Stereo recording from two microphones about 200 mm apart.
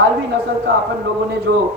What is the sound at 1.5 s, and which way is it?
Speech, 60° right (ahead or behind).